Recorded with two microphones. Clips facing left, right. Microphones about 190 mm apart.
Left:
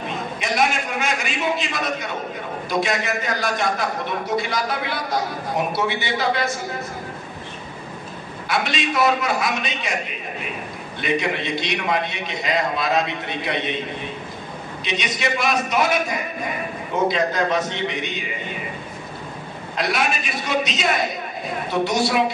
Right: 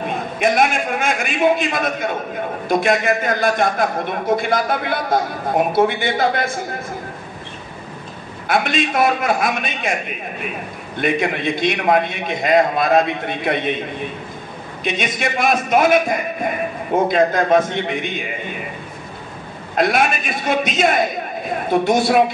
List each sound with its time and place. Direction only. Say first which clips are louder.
0.1 s a man's voice: right 9 dB; 50° right (ahead or behind)
8.5 s a man's voice: right 5 dB; 50° right (ahead or behind)
11.0 s a man's voice: right 4 dB; 50° right (ahead or behind)
14.9 s a man's voice: right 3 dB; 50° right (ahead or behind)
19.7 s a man's voice: right 6 dB; 50° right (ahead or behind)